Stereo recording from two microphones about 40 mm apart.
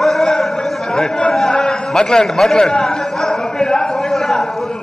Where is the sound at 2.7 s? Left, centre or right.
Centre.